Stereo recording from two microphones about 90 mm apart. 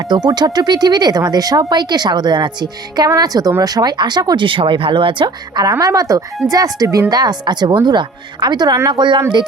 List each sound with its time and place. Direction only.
0.0 s speech: 50° right (ahead or behind)
4.4 s speech: 75° right (ahead or behind); by 5.7 s 55° right (ahead or behind)
5.8 s speech: 40° right (ahead or behind); by 9.2 s 60° right (ahead or behind)